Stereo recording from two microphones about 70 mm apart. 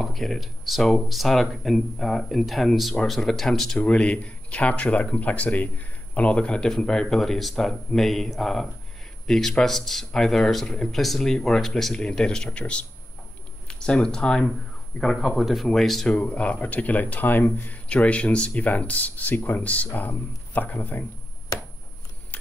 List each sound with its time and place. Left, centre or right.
0.0 s speech: centre
16.2 s speech: centre
17.8 s speech: centre